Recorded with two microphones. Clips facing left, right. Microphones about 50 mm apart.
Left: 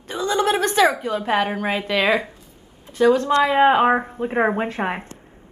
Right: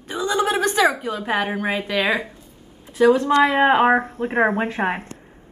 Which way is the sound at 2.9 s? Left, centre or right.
Centre.